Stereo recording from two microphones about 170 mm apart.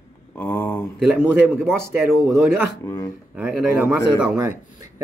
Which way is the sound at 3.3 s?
5° right (ahead or behind).